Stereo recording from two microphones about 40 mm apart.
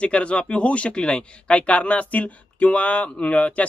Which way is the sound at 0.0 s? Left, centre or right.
Left.